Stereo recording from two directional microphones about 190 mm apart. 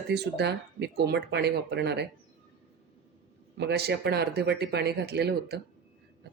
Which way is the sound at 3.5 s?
60° right (ahead or behind).